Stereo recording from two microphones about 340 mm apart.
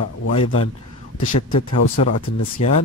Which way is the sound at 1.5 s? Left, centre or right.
Left.